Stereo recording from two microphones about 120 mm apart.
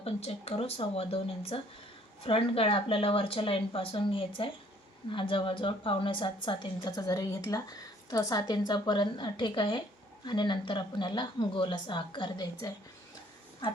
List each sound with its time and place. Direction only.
0.0 s speech: 60° left (ahead or behind)
6.8 s speech: 30° left (ahead or behind)
13.6 s a sound: 45° left (ahead or behind)